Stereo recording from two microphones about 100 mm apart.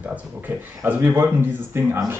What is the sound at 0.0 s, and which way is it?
Speech, 15° right (ahead or behind).